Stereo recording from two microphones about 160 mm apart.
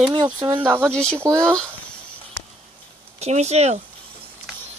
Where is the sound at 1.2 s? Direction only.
15° right (ahead or behind).